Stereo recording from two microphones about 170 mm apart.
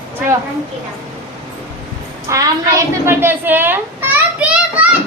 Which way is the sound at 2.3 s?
15° right (ahead or behind).